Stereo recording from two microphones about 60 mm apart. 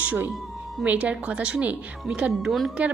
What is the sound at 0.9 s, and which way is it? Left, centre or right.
A woman's voice, right.